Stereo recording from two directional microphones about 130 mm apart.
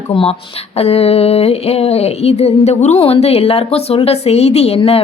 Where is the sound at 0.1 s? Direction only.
45° left (ahead or behind).